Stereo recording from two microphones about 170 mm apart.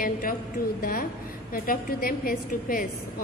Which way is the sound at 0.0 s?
55° left (ahead or behind).